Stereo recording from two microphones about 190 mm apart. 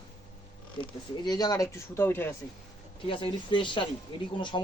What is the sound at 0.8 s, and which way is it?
Speech, 20° left (ahead or behind).